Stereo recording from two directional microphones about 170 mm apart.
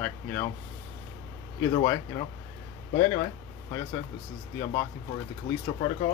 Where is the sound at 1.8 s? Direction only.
25° left (ahead or behind).